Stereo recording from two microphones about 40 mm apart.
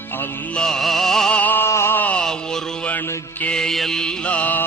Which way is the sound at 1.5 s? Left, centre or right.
Left.